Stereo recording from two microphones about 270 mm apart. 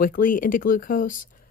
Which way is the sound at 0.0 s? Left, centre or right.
Left.